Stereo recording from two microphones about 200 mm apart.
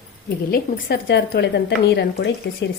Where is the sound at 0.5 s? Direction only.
50° left (ahead or behind).